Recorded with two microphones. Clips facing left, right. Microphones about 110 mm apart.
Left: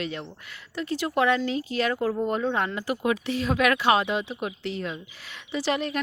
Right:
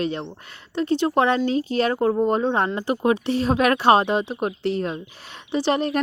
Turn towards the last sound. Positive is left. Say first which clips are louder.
# right 5 dB
turn(degrees=-35)  # may be behind; listen again after turning